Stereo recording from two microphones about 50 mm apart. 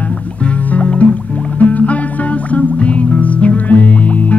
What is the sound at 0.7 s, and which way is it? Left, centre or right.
Music, left.